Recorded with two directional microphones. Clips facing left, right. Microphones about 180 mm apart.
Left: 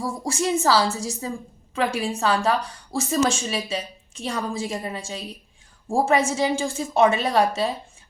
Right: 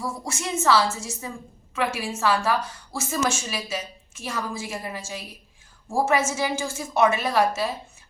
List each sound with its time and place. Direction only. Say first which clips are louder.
0.0 s a woman's voice: left 6 dB; 35° left (ahead or behind)